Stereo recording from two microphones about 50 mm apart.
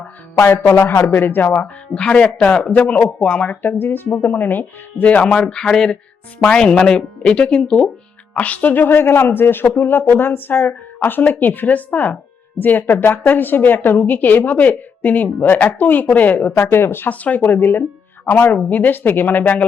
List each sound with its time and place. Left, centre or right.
0.4 s speech: left
1.6 s speech: left
3.6 s a woman's voice: left
8.9 s a woman's voice: left
16.6 s speech: left
17.1 s a woman's voice: left